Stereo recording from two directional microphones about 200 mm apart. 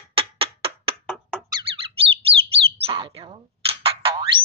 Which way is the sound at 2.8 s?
25° right (ahead or behind).